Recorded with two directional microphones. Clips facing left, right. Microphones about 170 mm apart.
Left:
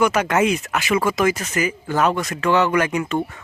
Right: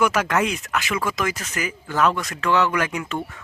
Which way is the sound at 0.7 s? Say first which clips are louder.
Left 5 dB; 25° left (ahead or behind).